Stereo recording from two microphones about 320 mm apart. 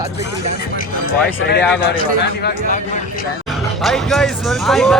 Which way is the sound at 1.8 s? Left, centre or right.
Left.